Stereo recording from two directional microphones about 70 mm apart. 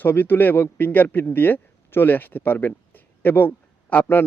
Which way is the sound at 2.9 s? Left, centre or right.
Left.